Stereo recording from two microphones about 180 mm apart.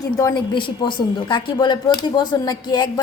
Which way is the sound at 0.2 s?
20° left (ahead or behind).